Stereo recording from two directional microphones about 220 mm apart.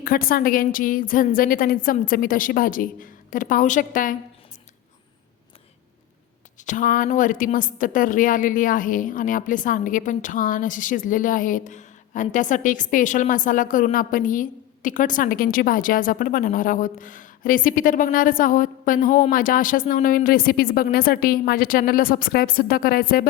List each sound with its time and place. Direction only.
0.0 s a woman's voice: 40° left (ahead or behind)
6.7 s a woman's voice: 35° left (ahead or behind)